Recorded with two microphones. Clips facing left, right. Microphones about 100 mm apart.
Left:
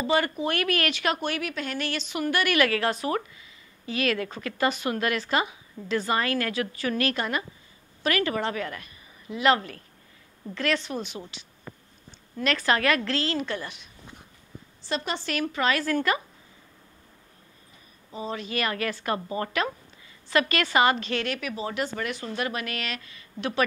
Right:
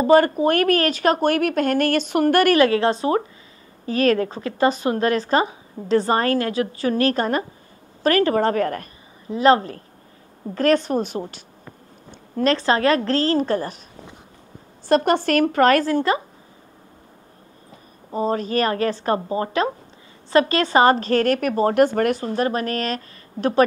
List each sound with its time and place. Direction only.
0.0 s speech: 45° right (ahead or behind)
2.5 s a woman's voice: 30° right (ahead or behind)
3.8 s speech: 40° right (ahead or behind)
9.3 s speech: 35° right (ahead or behind)
12.4 s speech: 30° right (ahead or behind)
14.9 s speech: 50° right (ahead or behind)
15.8 s a woman's voice: 30° right (ahead or behind)
18.1 s speech: 45° right (ahead or behind)
22.2 s speech: 35° right (ahead or behind)